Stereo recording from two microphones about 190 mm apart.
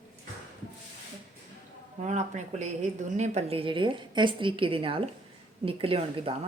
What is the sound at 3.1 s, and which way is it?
A woman's voice, 35° right (ahead or behind).